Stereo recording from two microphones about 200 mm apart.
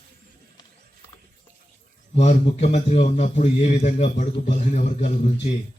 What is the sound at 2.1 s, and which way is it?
A man's voice, 35° left (ahead or behind).